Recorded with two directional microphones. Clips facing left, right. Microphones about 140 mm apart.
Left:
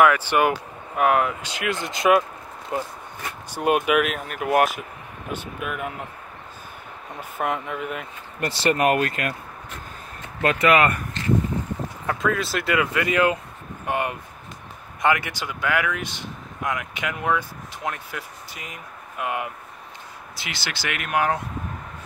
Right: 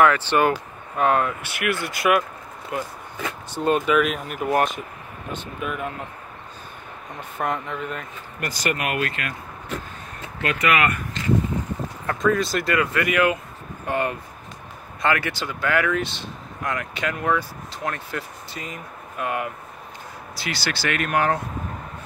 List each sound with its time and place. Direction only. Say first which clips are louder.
0.0 s speech: even; 10° left (ahead or behind); by 2.9 s 30° left (ahead or behind)
3.5 s speech: even; 10° left (ahead or behind)
7.2 s speech: even; 10° left (ahead or behind)
8.4 s speech: left 5 dB; 30° left (ahead or behind)
10.4 s speech: left 3 dB; 35° left (ahead or behind)
12.1 s speech: right 3 dB; 5° left (ahead or behind)
12.7 s speech: even; 15° left (ahead or behind)
13.1 s speech: even; 30° left (ahead or behind)
13.8 s speech: right 1 dB; 15° left (ahead or behind)